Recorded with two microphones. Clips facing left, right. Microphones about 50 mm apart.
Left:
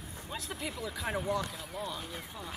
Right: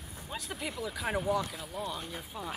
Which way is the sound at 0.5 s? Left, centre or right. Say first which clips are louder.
Right 2 dB; centre.